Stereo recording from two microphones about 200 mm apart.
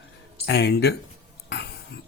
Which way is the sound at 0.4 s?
55° left (ahead or behind).